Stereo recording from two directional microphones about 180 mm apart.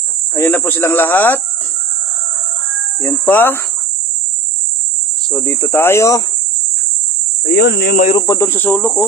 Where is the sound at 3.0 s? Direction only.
15° left (ahead or behind).